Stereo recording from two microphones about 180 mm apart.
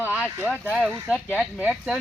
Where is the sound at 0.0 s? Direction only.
10° right (ahead or behind).